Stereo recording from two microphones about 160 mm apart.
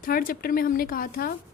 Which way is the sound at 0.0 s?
60° left (ahead or behind).